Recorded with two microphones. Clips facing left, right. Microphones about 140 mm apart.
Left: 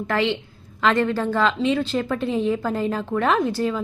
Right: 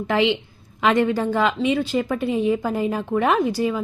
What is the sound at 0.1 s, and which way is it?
A woman's voice, 15° right (ahead or behind).